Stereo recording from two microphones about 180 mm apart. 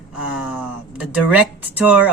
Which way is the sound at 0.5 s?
10° right (ahead or behind).